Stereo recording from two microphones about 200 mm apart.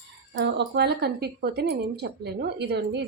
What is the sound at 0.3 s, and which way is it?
Speech, 60° right (ahead or behind).